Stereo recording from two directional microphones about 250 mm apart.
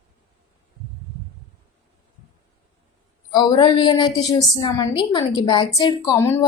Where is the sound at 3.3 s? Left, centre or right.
Centre.